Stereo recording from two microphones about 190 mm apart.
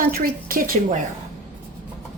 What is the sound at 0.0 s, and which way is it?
Speech, 50° right (ahead or behind).